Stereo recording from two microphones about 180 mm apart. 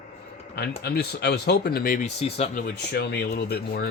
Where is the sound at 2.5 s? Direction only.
65° left (ahead or behind).